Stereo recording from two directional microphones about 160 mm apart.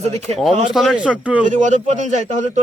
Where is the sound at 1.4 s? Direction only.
50° right (ahead or behind).